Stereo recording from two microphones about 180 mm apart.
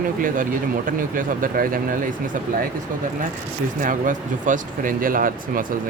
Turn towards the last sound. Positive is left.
turn(degrees=-50)  # may be behind; listen again after turning